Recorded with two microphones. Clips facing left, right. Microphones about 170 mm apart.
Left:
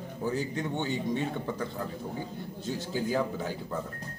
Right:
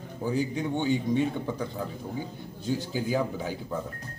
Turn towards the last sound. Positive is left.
turn(degrees=-5)  # may be behind; listen again after turning